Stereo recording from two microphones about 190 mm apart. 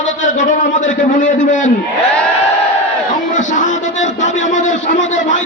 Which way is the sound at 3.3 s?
40° left (ahead or behind).